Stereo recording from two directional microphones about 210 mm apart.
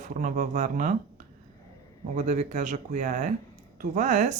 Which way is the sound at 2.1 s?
35° right (ahead or behind).